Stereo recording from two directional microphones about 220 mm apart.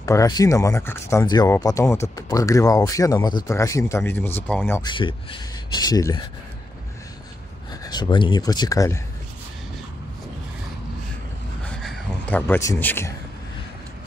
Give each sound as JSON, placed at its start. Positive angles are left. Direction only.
{"t": 0.0, "sound": "speech", "side_deg": 15}
{"t": 7.8, "sound": "speech", "side_deg": 20}
{"t": 11.7, "sound": "a sound", "side_deg": 0}